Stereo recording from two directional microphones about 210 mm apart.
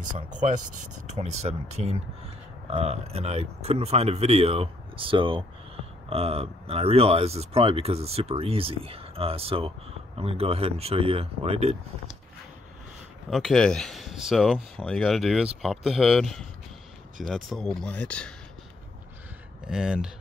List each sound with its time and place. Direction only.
0.3 s speech: 35° right (ahead or behind)
13.3 s speech: centre (ahead or behind)
19.6 s speech: 5° right (ahead or behind)